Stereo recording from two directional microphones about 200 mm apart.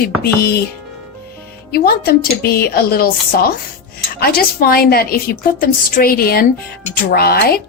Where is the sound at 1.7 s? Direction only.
50° left (ahead or behind).